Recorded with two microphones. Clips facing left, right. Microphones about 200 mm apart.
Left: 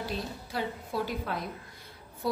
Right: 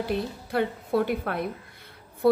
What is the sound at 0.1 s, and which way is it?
A woman's voice, 60° right (ahead or behind).